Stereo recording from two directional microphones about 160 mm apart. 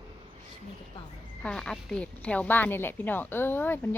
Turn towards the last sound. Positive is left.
turn(degrees=15)  # may be behind; listen again after turning